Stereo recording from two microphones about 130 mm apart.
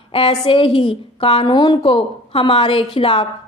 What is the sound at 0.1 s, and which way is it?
A woman's voice, 45° left (ahead or behind).